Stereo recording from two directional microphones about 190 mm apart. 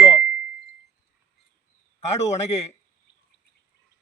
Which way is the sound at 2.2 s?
35° left (ahead or behind).